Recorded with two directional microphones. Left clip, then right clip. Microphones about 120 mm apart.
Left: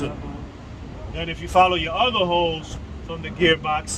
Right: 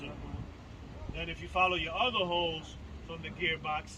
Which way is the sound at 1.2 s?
40° left (ahead or behind).